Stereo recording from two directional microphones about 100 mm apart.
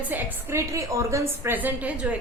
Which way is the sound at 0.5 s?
30° right (ahead or behind).